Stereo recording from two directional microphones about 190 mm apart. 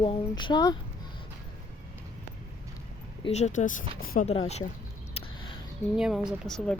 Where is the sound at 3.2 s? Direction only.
35° left (ahead or behind).